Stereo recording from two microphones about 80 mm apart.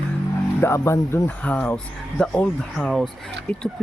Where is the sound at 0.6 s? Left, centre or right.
Left.